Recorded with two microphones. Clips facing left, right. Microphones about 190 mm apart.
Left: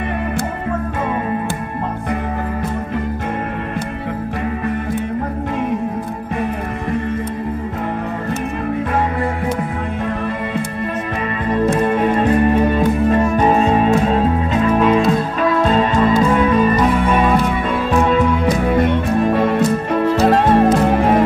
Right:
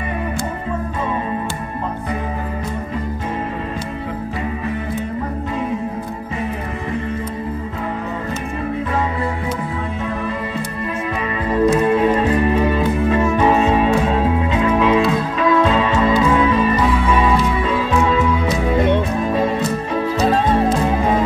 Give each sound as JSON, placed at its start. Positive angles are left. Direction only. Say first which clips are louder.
{"t": 11.7, "sound": "music", "louder": "right 1 dB", "side_deg": 50}